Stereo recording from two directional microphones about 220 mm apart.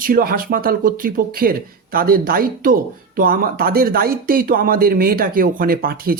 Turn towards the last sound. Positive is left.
turn(degrees=-45)  # may be behind; listen again after turning